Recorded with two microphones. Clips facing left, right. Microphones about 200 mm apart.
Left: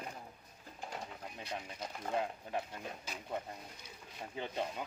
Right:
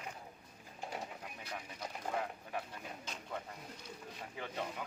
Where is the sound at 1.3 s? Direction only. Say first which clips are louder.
Left 6 dB; 25° left (ahead or behind).